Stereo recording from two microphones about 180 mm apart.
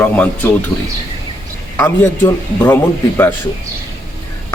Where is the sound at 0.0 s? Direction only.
10° left (ahead or behind).